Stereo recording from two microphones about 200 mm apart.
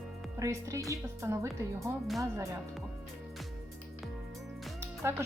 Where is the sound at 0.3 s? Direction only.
15° right (ahead or behind).